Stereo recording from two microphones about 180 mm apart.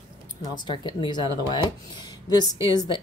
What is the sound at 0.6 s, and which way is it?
Speech, 25° left (ahead or behind).